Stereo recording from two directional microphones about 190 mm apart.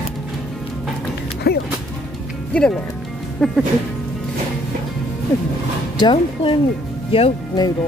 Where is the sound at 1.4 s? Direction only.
55° left (ahead or behind).